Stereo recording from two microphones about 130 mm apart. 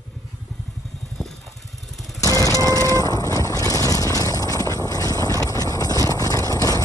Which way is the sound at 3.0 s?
25° left (ahead or behind).